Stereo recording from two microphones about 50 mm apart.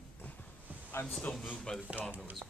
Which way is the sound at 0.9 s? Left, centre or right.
Left.